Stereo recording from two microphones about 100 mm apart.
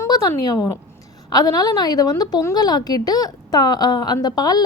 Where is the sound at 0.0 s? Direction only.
35° left (ahead or behind).